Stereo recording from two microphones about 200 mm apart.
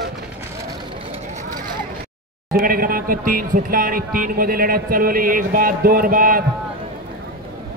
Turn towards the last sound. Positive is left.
turn(degrees=-45)  # may be behind; listen again after turning